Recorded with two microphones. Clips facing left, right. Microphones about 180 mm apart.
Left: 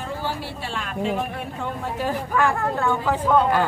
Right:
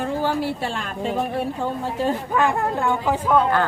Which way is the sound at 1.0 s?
35° right (ahead or behind).